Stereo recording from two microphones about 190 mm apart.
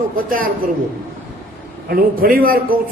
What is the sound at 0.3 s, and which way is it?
Speech, 50° right (ahead or behind).